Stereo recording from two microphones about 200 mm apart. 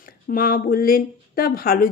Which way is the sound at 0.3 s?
45° left (ahead or behind).